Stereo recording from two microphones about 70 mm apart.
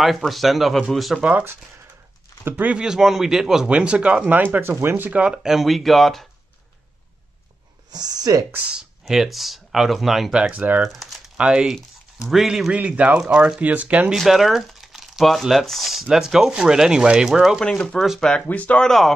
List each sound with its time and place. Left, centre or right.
0.0 s speech: centre
2.5 s speech: centre
5.2 s speech: centre
7.9 s speech: right
8.5 s speech: centre
10.5 s speech: right
10.8 s speech: centre
11.3 s speech: centre
12.7 s speech: centre
14.1 s speech: centre
17.6 s speech: centre
18.5 s speech: left
18.9 s speech: centre